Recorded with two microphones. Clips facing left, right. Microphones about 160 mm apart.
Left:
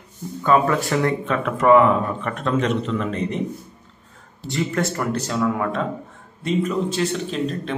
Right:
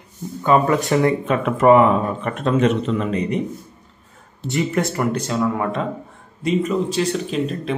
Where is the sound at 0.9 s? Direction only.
20° right (ahead or behind).